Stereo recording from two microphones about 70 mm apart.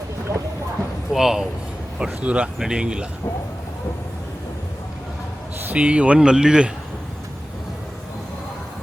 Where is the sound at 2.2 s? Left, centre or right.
Centre.